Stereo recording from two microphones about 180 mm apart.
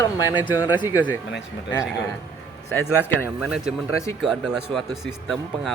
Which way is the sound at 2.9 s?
10° right (ahead or behind).